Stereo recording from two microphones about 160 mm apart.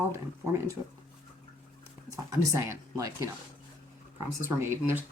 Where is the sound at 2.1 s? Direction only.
20° right (ahead or behind).